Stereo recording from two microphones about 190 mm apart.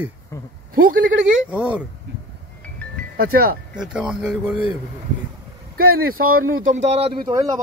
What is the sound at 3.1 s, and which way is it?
Speech, 50° right (ahead or behind).